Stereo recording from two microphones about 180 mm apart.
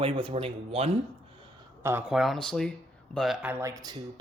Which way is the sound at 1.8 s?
15° right (ahead or behind).